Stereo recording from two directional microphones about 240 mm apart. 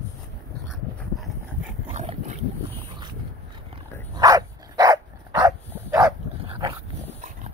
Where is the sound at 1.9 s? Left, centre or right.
Right.